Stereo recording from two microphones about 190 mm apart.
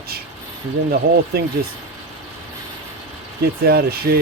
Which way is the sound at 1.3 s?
55° right (ahead or behind).